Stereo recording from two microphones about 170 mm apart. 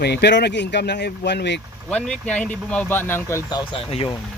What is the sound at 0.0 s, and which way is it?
Speech, 75° left (ahead or behind).